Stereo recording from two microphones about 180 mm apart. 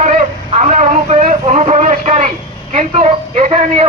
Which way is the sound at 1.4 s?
35° right (ahead or behind).